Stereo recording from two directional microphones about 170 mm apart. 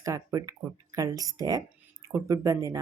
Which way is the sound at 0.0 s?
20° right (ahead or behind).